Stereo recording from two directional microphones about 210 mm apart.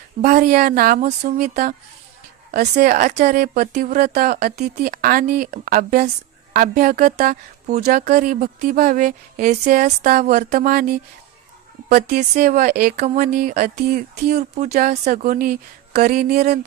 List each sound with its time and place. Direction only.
0.2 s speech: 40° right (ahead or behind)
11.9 s speech: 40° right (ahead or behind)
13.0 s speech: 35° right (ahead or behind)